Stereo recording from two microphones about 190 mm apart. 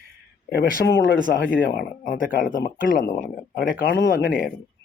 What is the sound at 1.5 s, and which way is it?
Speech, 50° left (ahead or behind).